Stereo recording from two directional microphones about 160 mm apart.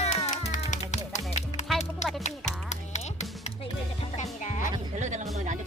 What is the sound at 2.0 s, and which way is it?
Music, 45° left (ahead or behind).